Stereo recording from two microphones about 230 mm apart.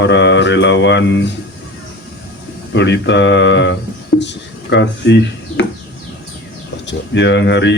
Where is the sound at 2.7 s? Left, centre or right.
Left.